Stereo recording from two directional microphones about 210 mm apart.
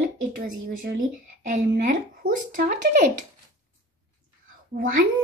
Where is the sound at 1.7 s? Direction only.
45° right (ahead or behind).